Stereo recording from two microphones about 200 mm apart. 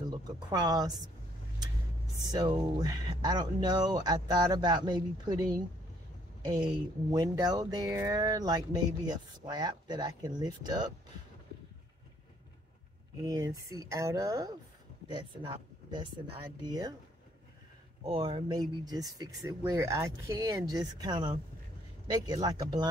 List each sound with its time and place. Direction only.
0.1 s speech: 20° right (ahead or behind)
2.2 s speech: 20° right (ahead or behind)
13.2 s speech: 15° right (ahead or behind)
18.0 s speech: 20° right (ahead or behind)